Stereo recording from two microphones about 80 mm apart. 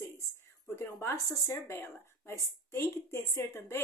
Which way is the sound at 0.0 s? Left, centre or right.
Left.